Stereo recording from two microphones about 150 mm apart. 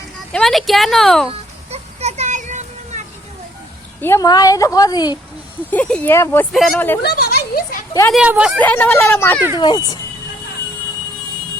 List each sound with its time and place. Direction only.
0.3 s speech: 5° left (ahead or behind)
1.3 s a sound: 45° right (ahead or behind)
4.0 s a woman's voice: 15° left (ahead or behind)
5.7 s speech: 10° left (ahead or behind)
7.0 s a sound: 90° left
8.1 s speech: 5° right (ahead or behind)
8.5 s speech: 10° left (ahead or behind)
9.6 s a woman's voice: 30° left (ahead or behind)